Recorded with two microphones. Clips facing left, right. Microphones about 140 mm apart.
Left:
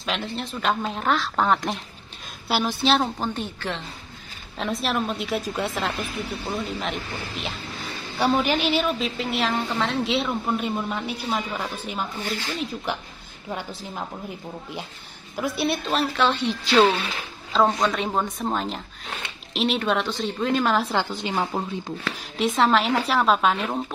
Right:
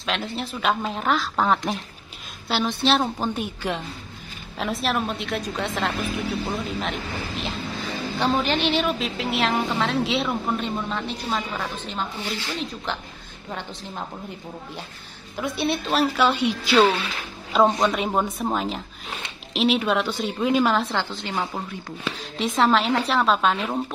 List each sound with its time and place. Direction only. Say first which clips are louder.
0.0 s speech: right 1 dB; centre (ahead or behind)
3.0 s a woman's voice: right 1 dB; 10° right (ahead or behind)
4.6 s speech: right 1 dB; centre (ahead or behind)
10.9 s a woman's voice: even; 10° left (ahead or behind)
15.3 s speech: even; centre (ahead or behind)
15.9 s a woman's voice: right 4 dB; 10° right (ahead or behind)
17.5 s a woman's voice: right 2 dB; 15° right (ahead or behind)
20.9 s a woman's voice: left 2 dB; 15° left (ahead or behind)
22.4 s speech: even; centre (ahead or behind)